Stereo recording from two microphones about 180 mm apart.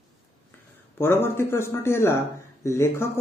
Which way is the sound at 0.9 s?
10° left (ahead or behind).